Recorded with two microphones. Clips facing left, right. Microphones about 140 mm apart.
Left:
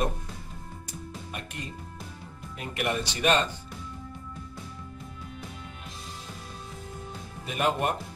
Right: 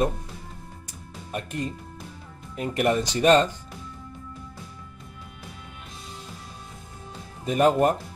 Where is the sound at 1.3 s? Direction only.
40° right (ahead or behind).